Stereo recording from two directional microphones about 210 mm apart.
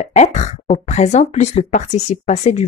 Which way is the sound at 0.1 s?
35° left (ahead or behind).